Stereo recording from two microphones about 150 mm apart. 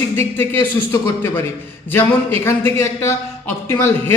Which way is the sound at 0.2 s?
15° left (ahead or behind).